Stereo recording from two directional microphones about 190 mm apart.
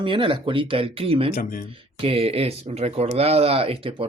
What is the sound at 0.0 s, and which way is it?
Speech, 25° right (ahead or behind).